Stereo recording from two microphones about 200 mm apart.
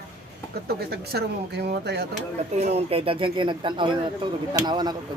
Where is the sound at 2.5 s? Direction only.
35° right (ahead or behind).